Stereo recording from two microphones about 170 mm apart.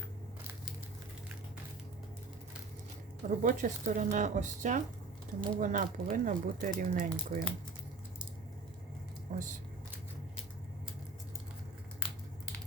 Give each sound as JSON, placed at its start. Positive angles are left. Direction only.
{"t": 3.2, "sound": "speech", "side_deg": -45}
{"t": 9.3, "sound": "speech", "side_deg": -50}